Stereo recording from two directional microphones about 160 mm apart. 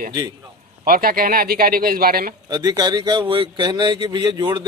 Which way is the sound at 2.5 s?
25° right (ahead or behind).